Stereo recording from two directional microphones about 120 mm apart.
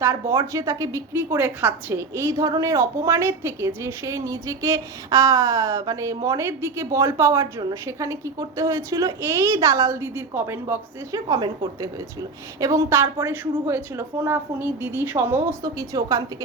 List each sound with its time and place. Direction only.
0.0 s a woman's voice: 20° right (ahead or behind)
15.6 s a woman's voice: 30° right (ahead or behind)